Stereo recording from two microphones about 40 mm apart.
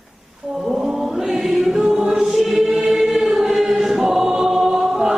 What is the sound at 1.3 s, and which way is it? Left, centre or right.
Choir, centre.